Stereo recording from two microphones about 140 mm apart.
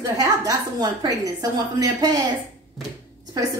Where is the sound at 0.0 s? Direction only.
25° right (ahead or behind).